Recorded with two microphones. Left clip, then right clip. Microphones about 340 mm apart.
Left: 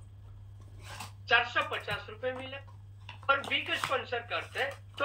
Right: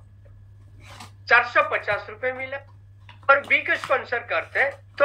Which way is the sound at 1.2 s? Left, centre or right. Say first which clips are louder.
Right 10 dB; centre.